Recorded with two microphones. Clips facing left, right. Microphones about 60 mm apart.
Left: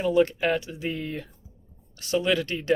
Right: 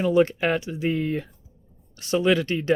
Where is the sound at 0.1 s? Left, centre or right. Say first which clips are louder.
Right 1 dB; right.